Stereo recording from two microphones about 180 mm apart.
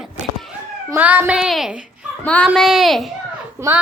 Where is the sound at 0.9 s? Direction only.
10° right (ahead or behind).